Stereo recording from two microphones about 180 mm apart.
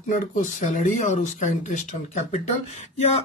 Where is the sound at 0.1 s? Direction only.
45° left (ahead or behind).